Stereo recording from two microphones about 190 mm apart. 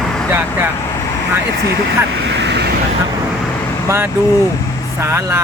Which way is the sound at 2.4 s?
65° right (ahead or behind).